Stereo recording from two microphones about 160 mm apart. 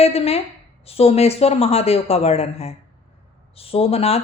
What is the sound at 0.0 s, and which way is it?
Speech, 40° left (ahead or behind).